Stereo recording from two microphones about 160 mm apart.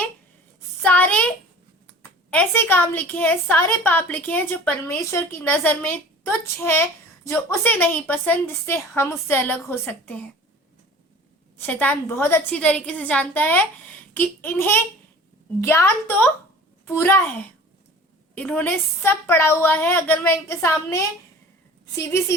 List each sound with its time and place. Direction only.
0.8 s a child's voice: 10° left (ahead or behind)
11.5 s a woman's voice: 10° left (ahead or behind)